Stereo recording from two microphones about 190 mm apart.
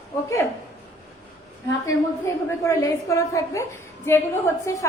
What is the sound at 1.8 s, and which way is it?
A woman's voice, 15° left (ahead or behind).